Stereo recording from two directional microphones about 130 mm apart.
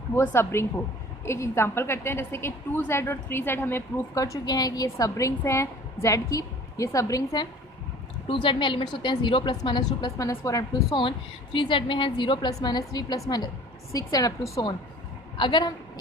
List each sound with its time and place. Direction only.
0.1 s a woman's voice: 20° left (ahead or behind)
8.3 s a woman's voice: 40° left (ahead or behind)